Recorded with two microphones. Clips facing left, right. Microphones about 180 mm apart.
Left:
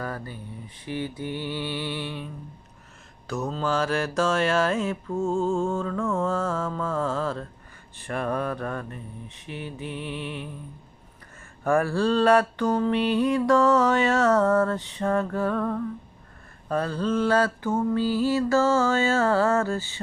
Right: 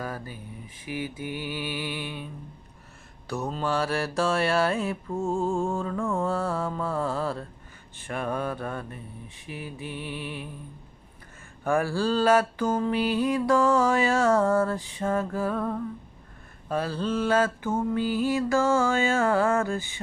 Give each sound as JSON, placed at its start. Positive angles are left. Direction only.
{"t": 0.0, "sound": "mantra", "side_deg": -10}
{"t": 3.3, "sound": "mantra", "side_deg": -15}
{"t": 4.7, "sound": "music", "side_deg": -35}
{"t": 5.4, "sound": "mantra", "side_deg": -15}
{"t": 7.9, "sound": "mantra", "side_deg": 0}
{"t": 9.3, "sound": "mantra", "side_deg": 30}
{"t": 9.8, "sound": "mantra", "side_deg": -5}
{"t": 11.6, "sound": "mantra", "side_deg": 0}